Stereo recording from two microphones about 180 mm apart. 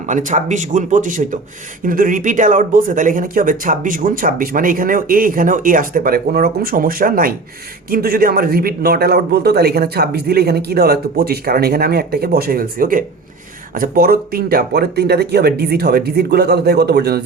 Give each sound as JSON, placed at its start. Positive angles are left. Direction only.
{"t": 0.1, "sound": "a man's voice", "side_deg": -45}